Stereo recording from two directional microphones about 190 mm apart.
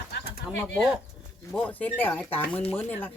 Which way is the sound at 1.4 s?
10° left (ahead or behind).